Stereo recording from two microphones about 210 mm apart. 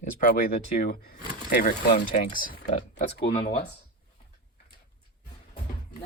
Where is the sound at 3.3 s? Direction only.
35° left (ahead or behind).